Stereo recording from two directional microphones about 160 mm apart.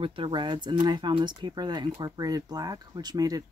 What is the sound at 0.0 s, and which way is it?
Speech, 35° right (ahead or behind).